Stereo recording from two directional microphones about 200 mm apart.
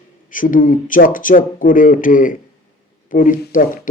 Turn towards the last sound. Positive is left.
turn(degrees=40)  # may be behind; listen again after turning